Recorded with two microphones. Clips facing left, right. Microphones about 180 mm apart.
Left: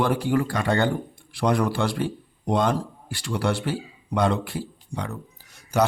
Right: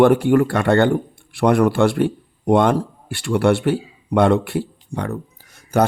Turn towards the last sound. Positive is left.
turn(degrees=-55)  # may be behind; listen again after turning